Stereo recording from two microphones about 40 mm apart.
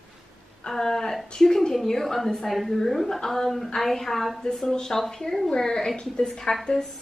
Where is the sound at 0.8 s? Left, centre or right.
Centre.